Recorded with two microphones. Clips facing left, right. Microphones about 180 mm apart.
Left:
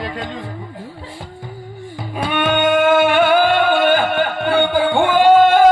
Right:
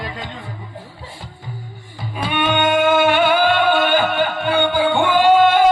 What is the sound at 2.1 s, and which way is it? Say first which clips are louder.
Music: left 2 dB; 50° left (ahead or behind).